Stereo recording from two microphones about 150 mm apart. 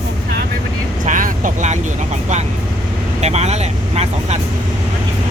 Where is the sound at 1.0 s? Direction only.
60° right (ahead or behind).